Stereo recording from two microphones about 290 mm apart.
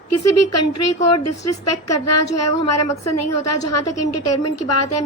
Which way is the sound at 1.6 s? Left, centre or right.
Left.